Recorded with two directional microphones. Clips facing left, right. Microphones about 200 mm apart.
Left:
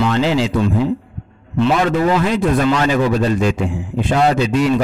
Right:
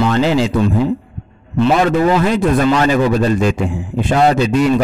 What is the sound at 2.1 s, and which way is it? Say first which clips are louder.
A man's voice: right 2 dB; 45° right (ahead or behind).